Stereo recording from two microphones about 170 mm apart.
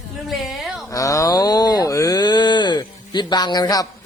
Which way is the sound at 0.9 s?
20° left (ahead or behind).